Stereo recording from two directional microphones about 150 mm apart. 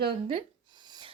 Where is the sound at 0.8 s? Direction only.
30° right (ahead or behind).